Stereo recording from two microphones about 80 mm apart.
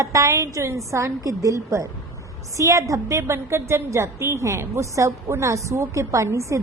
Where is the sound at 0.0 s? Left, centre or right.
Right.